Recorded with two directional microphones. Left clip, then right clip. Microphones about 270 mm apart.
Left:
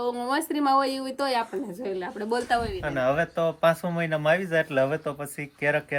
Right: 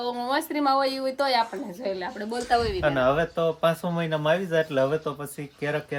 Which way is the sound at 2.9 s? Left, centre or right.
Centre.